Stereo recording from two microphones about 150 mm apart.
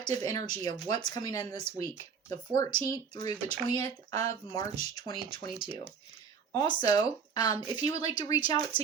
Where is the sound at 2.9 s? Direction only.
25° left (ahead or behind).